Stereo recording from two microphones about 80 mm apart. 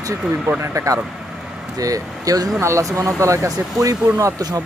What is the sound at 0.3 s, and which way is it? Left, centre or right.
Speech, right.